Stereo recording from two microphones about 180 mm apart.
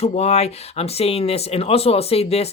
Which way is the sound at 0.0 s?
35° left (ahead or behind).